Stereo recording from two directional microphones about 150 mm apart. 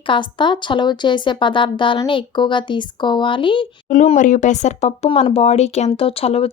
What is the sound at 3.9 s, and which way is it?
Speech, 55° left (ahead or behind).